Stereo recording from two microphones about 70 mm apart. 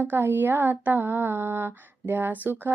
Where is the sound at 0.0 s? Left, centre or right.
Right.